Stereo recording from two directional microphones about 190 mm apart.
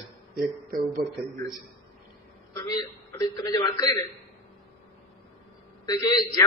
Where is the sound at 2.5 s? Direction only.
20° left (ahead or behind).